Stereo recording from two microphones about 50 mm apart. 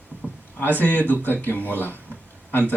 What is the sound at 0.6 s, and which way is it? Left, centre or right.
A man's voice, left.